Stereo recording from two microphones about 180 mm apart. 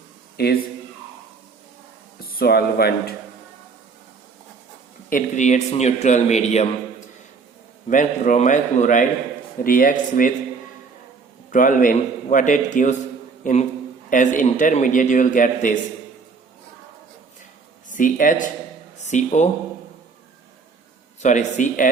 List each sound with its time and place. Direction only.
0.4 s a man's voice: 60° left (ahead or behind)
2.2 s speech: 60° left (ahead or behind)
5.0 s speech: 45° left (ahead or behind)
7.9 s a man's voice: 45° left (ahead or behind)
11.5 s a man's voice: 45° left (ahead or behind)
17.8 s speech: 45° left (ahead or behind)
21.2 s a man's voice: 40° left (ahead or behind)